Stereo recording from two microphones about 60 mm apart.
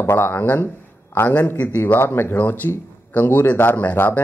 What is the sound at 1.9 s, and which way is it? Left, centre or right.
Speech, left.